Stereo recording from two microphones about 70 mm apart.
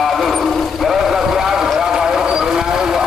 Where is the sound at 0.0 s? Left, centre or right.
Centre.